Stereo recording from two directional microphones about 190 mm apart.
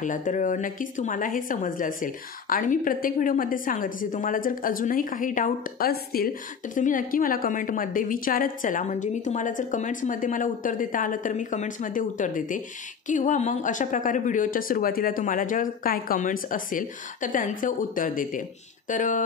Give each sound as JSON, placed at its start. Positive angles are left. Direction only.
{"t": 0.0, "sound": "speech", "side_deg": 40}